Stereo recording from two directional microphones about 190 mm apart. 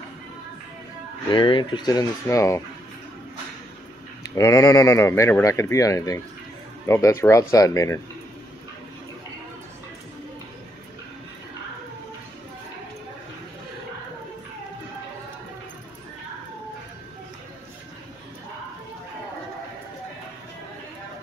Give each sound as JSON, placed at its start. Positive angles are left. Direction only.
{"t": 1.3, "sound": "speech", "side_deg": 25}
{"t": 4.2, "sound": "speech", "side_deg": 15}